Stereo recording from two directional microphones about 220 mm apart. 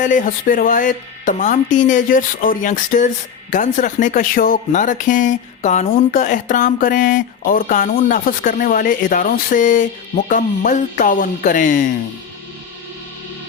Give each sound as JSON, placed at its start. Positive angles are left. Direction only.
{"t": 0.0, "sound": "speech", "side_deg": 35}